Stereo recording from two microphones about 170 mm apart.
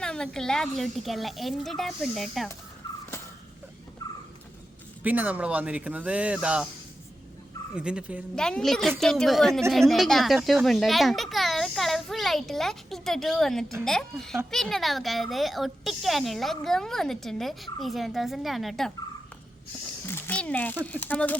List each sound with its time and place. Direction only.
0.0 s speech: 5° left (ahead or behind)
2.8 s a sound: 25° left (ahead or behind)
4.0 s a sound: 25° left (ahead or behind)
5.0 s speech: 10° right (ahead or behind)
7.8 s speech: 5° right (ahead or behind)
8.4 s a child's voice: 5° left (ahead or behind)
20.1 s a child's voice: 10° left (ahead or behind)